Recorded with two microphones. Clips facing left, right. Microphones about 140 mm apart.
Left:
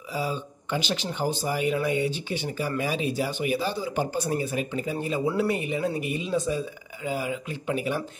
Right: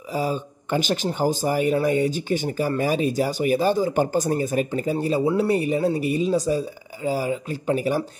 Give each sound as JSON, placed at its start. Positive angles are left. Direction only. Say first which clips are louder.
{"t": 0.1, "sound": "speech", "louder": "right 5 dB", "side_deg": -45}